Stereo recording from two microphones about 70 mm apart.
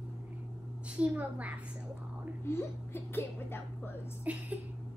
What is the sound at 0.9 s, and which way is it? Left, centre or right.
Speech, centre.